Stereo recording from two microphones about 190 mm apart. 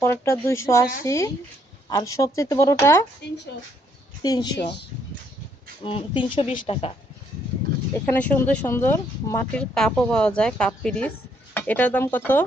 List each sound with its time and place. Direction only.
0.0 s speech: 15° left (ahead or behind)
4.2 s speech: 20° left (ahead or behind)
5.8 s speech: 30° left (ahead or behind)
8.1 s speech: 10° left (ahead or behind)